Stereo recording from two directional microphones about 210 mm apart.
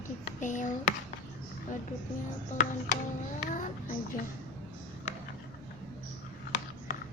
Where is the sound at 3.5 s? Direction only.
40° left (ahead or behind).